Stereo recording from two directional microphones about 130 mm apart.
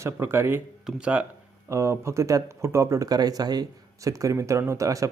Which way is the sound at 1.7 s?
20° right (ahead or behind).